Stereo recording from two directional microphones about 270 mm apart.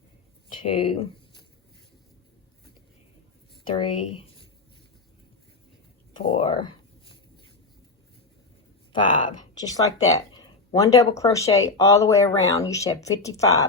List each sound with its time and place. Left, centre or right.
0.5 s a sound: centre
3.8 s speech: centre
6.2 s speech: centre
8.9 s speech: centre